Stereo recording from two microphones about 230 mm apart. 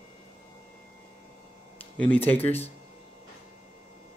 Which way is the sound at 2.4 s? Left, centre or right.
Left.